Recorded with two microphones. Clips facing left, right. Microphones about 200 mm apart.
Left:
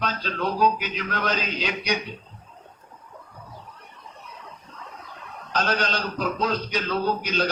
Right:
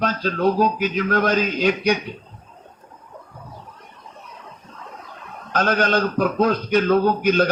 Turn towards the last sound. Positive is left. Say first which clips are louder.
# right 7 dB
turn(degrees=-50)  # may be behind; listen again after turning